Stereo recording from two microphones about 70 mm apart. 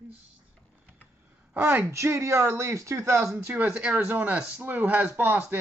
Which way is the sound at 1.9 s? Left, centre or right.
Right.